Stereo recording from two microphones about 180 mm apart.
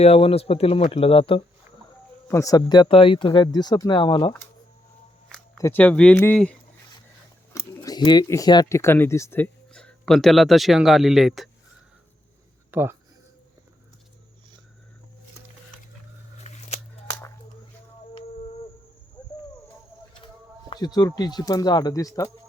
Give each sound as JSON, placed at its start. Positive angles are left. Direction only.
{"t": 0.0, "sound": "speech", "side_deg": 35}
{"t": 2.2, "sound": "speech", "side_deg": 15}
{"t": 5.5, "sound": "speech", "side_deg": 10}
{"t": 7.5, "sound": "speech", "side_deg": 20}
{"t": 12.7, "sound": "speech", "side_deg": -10}
{"t": 16.4, "sound": "a sound", "side_deg": 35}
{"t": 17.1, "sound": "a sound", "side_deg": 20}
{"t": 18.1, "sound": "a sound", "side_deg": 35}
{"t": 20.2, "sound": "speech", "side_deg": 25}